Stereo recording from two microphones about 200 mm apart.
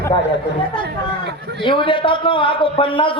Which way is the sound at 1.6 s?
25° left (ahead or behind).